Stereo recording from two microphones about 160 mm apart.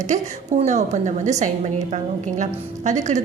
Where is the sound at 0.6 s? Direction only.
50° right (ahead or behind).